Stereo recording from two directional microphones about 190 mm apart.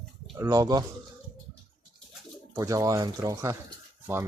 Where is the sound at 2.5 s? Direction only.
15° right (ahead or behind).